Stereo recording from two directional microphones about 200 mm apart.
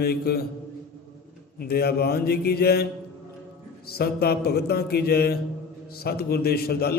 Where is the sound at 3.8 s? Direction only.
50° left (ahead or behind).